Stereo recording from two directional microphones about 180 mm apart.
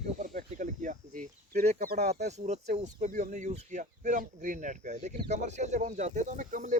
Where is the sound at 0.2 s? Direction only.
45° right (ahead or behind).